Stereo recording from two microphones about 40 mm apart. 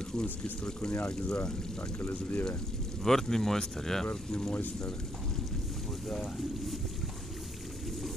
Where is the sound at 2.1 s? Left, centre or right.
Left.